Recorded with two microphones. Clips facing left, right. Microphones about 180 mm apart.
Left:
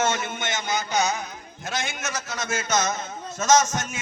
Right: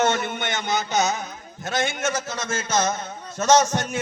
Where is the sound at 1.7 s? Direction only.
55° right (ahead or behind).